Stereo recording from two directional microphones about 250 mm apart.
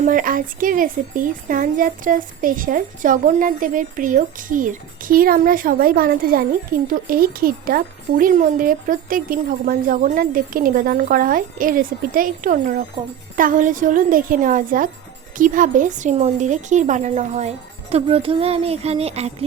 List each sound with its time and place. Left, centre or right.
0.0 s a woman's voice: right